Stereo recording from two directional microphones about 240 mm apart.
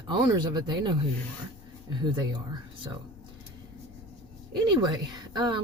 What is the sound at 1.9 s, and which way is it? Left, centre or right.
Speech, centre.